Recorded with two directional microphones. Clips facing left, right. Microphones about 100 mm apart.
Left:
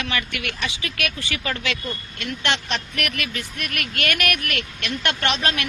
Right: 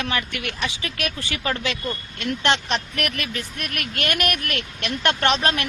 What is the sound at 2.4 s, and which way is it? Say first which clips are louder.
Speech: right 3 dB; 35° right (ahead or behind).